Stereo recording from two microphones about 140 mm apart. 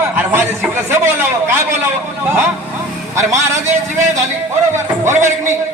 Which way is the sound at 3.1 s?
20° right (ahead or behind).